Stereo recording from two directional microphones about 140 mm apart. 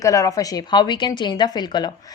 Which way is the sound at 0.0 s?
25° left (ahead or behind).